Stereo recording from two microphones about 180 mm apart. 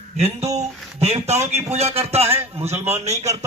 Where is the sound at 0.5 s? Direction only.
35° right (ahead or behind).